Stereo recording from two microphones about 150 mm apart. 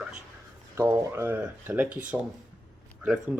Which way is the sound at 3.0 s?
10° right (ahead or behind).